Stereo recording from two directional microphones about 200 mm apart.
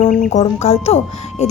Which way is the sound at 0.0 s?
40° left (ahead or behind).